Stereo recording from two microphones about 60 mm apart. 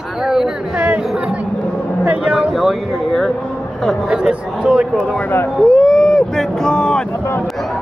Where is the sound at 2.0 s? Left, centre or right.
Centre.